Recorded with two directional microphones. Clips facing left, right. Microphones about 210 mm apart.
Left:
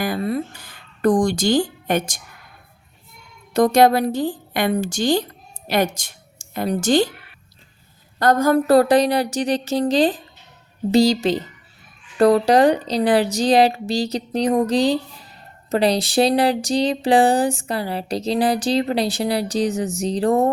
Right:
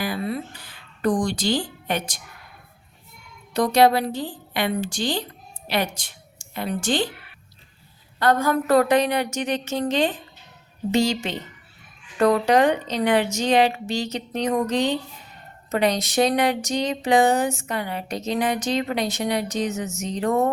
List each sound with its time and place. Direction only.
0.0 s speech: 45° left (ahead or behind)
3.5 s a woman's voice: 45° left (ahead or behind)
8.2 s a woman's voice: 40° left (ahead or behind)